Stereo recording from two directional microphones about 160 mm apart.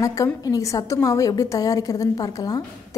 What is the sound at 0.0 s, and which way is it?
A woman's voice, 20° left (ahead or behind).